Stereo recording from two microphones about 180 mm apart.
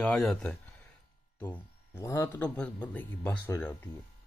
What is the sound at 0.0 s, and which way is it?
Speech, 5° left (ahead or behind).